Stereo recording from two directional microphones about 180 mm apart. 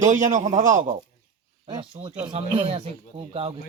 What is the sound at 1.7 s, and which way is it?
Speech, 25° right (ahead or behind).